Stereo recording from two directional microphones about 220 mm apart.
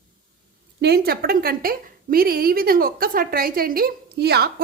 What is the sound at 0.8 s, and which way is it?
A woman's voice, 45° right (ahead or behind).